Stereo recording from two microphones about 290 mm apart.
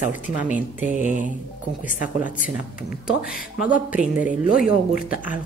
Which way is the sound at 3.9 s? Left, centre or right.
Centre.